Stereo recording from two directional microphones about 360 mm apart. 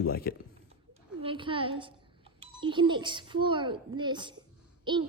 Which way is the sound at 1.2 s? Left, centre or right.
Centre.